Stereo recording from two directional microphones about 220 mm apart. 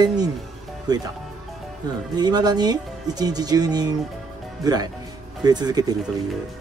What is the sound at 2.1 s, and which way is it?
Speech, 20° right (ahead or behind).